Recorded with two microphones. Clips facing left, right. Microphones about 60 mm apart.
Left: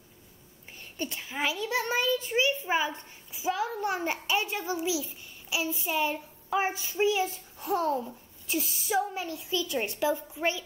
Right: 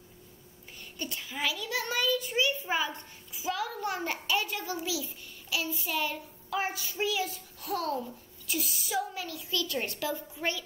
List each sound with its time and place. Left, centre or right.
0.9 s a child's voice: left